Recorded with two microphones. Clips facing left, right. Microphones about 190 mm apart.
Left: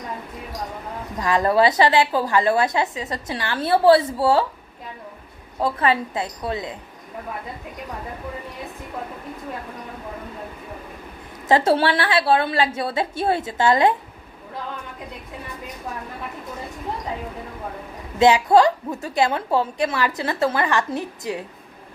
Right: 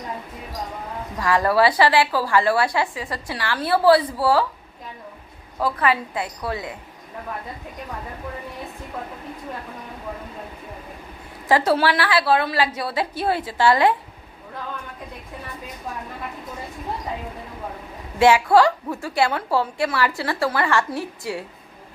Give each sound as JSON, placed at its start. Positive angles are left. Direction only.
{"t": 1.2, "sound": "a woman's voice", "side_deg": 20}
{"t": 5.5, "sound": "a woman's voice", "side_deg": 25}
{"t": 11.4, "sound": "a woman's voice", "side_deg": 25}
{"t": 18.2, "sound": "a woman's voice", "side_deg": 20}